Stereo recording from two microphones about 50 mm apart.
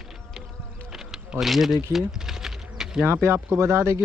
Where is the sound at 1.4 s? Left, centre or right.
Centre.